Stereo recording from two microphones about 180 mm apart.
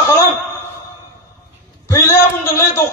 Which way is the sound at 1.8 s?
15° left (ahead or behind).